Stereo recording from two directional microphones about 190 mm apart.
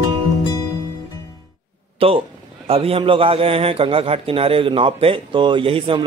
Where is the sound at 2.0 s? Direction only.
30° right (ahead or behind).